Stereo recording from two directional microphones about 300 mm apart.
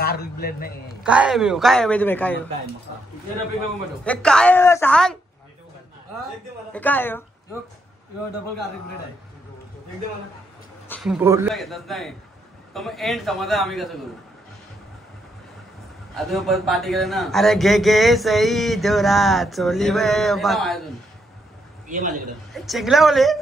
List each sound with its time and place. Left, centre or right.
0.0 s a man's voice: left
1.0 s speech: centre
4.0 s speech: centre
6.7 s a woman's voice: centre
10.9 s speech: centre
16.2 s speech: centre
21.8 s a man's voice: right
22.5 s speech: centre